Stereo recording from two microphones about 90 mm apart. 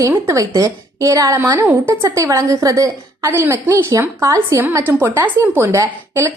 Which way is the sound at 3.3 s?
30° right (ahead or behind).